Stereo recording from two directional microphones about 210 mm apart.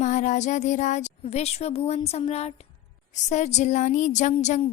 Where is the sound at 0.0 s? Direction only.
35° left (ahead or behind).